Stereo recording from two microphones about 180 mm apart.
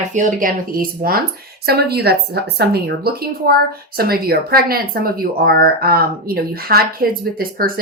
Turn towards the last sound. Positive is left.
turn(degrees=-55)  # may be behind; listen again after turning